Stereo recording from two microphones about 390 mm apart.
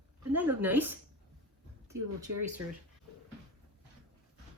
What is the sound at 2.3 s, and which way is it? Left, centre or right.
Speech, right.